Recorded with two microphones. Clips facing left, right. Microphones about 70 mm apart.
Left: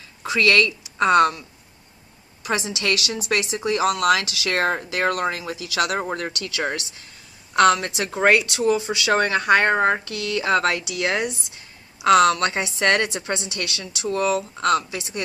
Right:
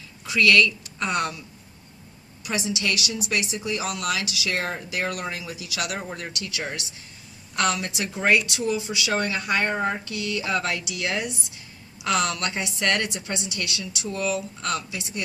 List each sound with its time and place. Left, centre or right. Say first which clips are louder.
0.3 s speech: left 1 dB; left
2.6 s speech: left 2 dB; left
3.2 s a woman's voice: left 6 dB; left
7.9 s a woman's voice: left 4 dB; left
14.8 s a woman's voice: left 3 dB; left